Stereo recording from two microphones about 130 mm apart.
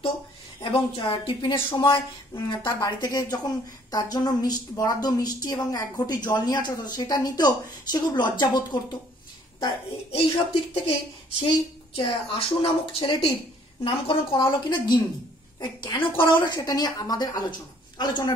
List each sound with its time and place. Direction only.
0.6 s a woman's voice: 40° left (ahead or behind)
2.3 s a woman's voice: 30° left (ahead or behind)
10.1 s a woman's voice: 45° left (ahead or behind)